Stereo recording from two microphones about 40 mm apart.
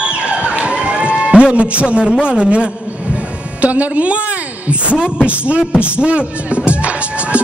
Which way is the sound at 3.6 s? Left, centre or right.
Right.